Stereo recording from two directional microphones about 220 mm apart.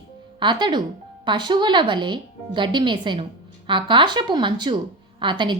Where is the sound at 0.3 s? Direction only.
20° right (ahead or behind).